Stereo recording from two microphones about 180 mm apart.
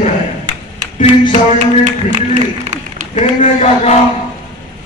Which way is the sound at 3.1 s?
40° left (ahead or behind).